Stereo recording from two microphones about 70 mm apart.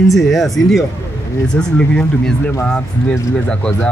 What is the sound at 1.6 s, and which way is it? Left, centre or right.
Speech, centre.